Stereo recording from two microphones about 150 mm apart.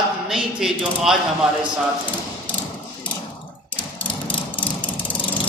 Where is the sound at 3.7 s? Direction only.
10° left (ahead or behind).